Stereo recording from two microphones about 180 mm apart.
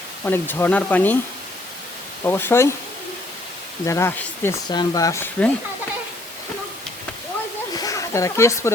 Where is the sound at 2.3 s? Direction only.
10° left (ahead or behind).